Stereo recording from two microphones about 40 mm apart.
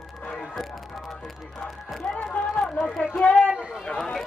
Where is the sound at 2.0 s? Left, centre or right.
Left.